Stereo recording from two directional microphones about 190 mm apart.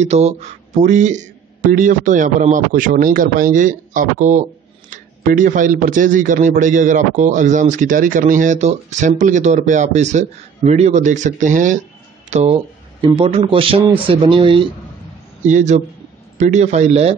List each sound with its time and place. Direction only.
0.0 s a man's voice: 35° right (ahead or behind)
15.4 s a man's voice: 40° right (ahead or behind)